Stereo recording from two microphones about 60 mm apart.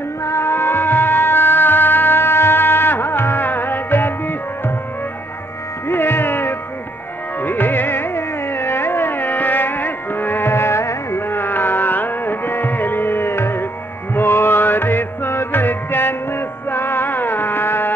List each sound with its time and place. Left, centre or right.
0.2 s music: left
5.9 s music: left